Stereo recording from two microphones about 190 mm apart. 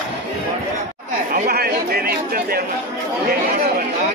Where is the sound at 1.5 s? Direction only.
55° right (ahead or behind).